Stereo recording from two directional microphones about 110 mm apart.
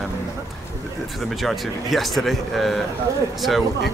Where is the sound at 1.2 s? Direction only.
Centre (ahead or behind).